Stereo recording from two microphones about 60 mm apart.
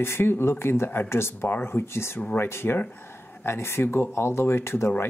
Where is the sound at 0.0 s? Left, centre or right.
Left.